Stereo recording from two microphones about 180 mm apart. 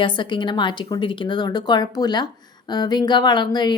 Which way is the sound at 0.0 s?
25° left (ahead or behind).